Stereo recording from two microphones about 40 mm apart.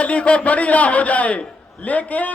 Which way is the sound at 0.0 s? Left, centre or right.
Left.